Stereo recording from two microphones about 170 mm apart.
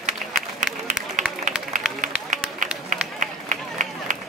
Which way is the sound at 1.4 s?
50° right (ahead or behind).